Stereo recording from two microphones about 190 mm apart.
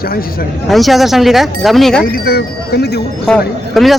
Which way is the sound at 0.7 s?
Centre (ahead or behind).